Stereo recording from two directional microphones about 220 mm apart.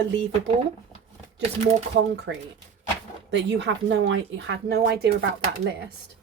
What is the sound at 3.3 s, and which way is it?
Speech, 55° right (ahead or behind).